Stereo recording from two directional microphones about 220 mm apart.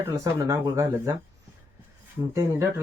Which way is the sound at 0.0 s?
15° right (ahead or behind).